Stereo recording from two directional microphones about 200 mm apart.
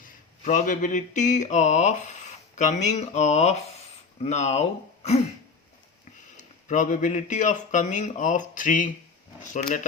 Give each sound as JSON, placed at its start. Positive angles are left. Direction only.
{"t": 0.0, "sound": "a sound", "side_deg": 40}
{"t": 4.2, "sound": "speech", "side_deg": 35}
{"t": 6.3, "sound": "speech", "side_deg": 40}